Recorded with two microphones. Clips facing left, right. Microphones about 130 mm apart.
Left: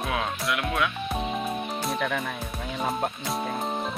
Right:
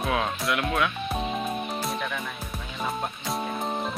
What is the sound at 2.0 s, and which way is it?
Speech, 60° left (ahead or behind).